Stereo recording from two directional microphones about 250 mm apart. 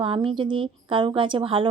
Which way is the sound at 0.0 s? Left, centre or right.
Right.